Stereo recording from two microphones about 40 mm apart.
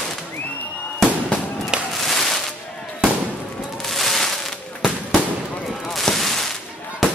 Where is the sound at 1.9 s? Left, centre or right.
Centre.